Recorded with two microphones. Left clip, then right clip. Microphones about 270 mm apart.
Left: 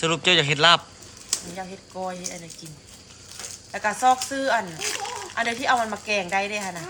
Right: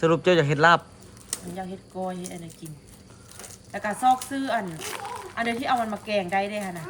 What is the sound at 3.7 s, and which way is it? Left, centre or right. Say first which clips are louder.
Speech: left 2 dB; centre.